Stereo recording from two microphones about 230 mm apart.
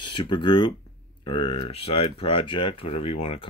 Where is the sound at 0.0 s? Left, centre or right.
Left.